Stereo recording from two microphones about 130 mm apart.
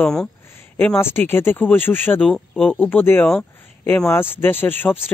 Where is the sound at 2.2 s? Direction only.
5° left (ahead or behind).